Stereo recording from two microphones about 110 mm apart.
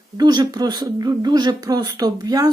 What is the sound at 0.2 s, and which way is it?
Speech, 40° right (ahead or behind).